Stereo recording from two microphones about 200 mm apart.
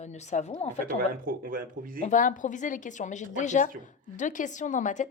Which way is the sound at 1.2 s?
45° right (ahead or behind).